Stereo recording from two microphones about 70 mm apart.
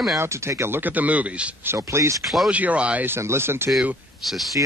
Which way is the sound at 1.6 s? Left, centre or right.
Right.